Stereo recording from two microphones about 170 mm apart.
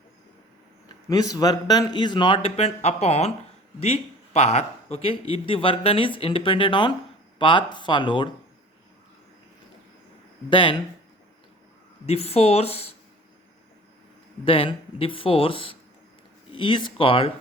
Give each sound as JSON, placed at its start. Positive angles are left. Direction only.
{"t": 0.9, "sound": "a man's voice", "side_deg": 20}
{"t": 10.5, "sound": "a man's voice", "side_deg": 30}
{"t": 12.0, "sound": "speech", "side_deg": 35}
{"t": 14.4, "sound": "speech", "side_deg": 30}